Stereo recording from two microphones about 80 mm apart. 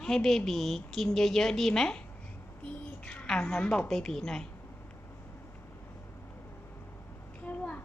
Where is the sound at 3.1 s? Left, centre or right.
Centre.